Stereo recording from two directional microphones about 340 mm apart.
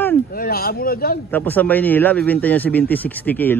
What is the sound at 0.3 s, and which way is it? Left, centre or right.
Speech, left.